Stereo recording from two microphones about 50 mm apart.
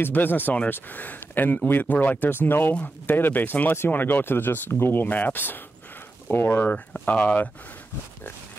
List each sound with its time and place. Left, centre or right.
0.0 s speech: left
3.7 s speech: left
5.0 s speech: left
7.1 s speech: left